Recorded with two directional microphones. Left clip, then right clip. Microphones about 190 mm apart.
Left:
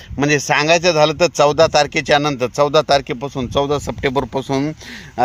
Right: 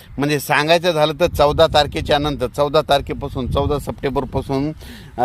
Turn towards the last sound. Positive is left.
turn(degrees=0)  # may be behind; listen again after turning